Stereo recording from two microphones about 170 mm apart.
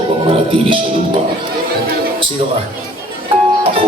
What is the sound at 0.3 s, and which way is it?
Speech, 30° right (ahead or behind).